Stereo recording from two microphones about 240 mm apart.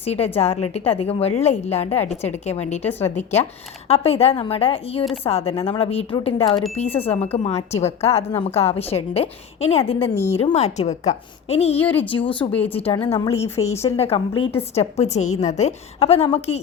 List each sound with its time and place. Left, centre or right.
0.0 s a woman's voice: left
10.2 s speech: centre
10.4 s a woman's voice: left
11.8 s speech: centre
12.1 s a woman's voice: left
13.4 s a woman's voice: left